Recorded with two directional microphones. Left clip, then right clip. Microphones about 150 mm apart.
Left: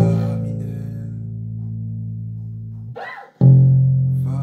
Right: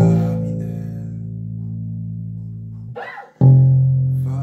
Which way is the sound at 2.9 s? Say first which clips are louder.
Right 1 dB; 25° left (ahead or behind).